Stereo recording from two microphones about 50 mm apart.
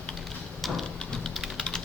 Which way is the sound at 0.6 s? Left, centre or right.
Centre.